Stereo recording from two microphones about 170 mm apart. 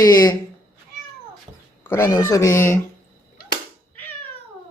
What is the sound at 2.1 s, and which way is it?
Speech, 20° left (ahead or behind).